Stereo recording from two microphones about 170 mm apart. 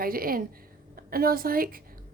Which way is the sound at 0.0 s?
60° right (ahead or behind).